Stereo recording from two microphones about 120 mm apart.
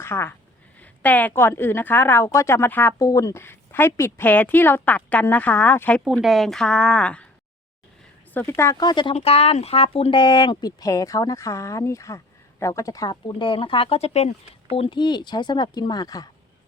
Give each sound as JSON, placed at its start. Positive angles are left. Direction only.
{"t": 0.0, "sound": "a woman's voice", "side_deg": 20}
{"t": 3.1, "sound": "a woman's voice", "side_deg": 25}
{"t": 6.2, "sound": "a woman's voice", "side_deg": 0}
{"t": 8.3, "sound": "speech", "side_deg": 20}
{"t": 8.7, "sound": "speech", "side_deg": 35}
{"t": 9.1, "sound": "speech", "side_deg": 55}